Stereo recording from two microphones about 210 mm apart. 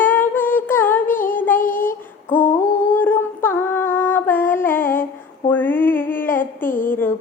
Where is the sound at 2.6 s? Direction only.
40° left (ahead or behind).